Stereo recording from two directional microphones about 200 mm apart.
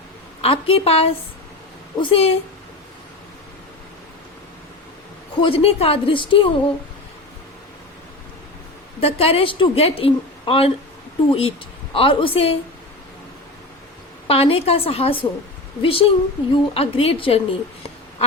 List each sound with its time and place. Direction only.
0.4 s a woman's voice: 30° left (ahead or behind)
5.4 s a woman's voice: 30° left (ahead or behind)
9.0 s a woman's voice: 30° left (ahead or behind)
14.3 s a woman's voice: 30° left (ahead or behind)